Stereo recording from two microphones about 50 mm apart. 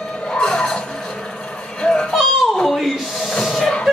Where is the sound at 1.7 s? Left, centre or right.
Centre.